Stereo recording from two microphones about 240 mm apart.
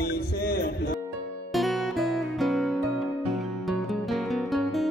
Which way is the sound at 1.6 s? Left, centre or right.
Centre.